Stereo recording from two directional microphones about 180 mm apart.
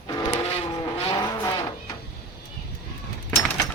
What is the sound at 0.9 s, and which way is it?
Vehicle, 25° left (ahead or behind).